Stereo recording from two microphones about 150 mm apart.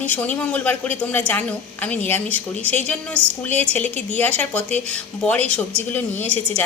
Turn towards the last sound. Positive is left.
turn(degrees=10)  # may be behind; listen again after turning